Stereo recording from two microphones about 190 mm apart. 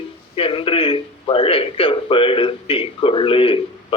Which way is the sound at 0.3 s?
30° left (ahead or behind).